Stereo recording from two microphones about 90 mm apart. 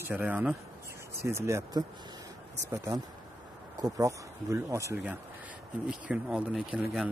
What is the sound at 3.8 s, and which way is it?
Speech, 40° right (ahead or behind).